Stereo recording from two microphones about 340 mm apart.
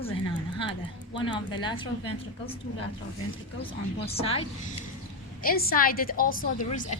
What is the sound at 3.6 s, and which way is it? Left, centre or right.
A woman's voice, centre.